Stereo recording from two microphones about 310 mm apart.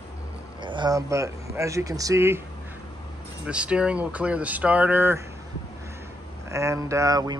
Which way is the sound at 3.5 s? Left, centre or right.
Centre.